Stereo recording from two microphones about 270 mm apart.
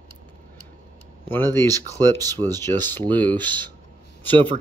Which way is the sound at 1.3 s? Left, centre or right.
Centre.